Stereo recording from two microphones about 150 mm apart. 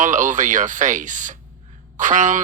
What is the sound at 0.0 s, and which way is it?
Speech, 55° right (ahead or behind).